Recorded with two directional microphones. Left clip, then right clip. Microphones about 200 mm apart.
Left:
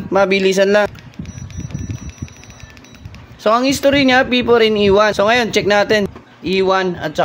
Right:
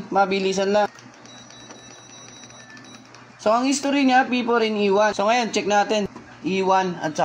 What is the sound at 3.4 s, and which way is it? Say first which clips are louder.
Speech: left 6 dB; 45° left (ahead or behind).